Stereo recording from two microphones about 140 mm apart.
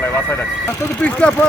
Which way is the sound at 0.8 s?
15° left (ahead or behind).